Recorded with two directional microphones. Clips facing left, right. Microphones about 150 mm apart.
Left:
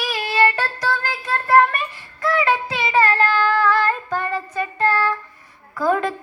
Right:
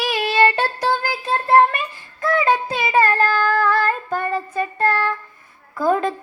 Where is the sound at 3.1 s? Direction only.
45° right (ahead or behind).